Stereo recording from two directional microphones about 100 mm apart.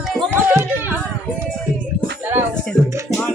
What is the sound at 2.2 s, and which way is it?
Music, 20° right (ahead or behind).